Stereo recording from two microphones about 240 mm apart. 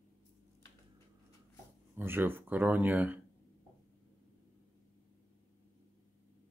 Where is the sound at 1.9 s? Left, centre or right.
Centre.